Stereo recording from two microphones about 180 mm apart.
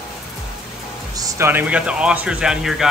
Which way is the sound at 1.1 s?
15° right (ahead or behind).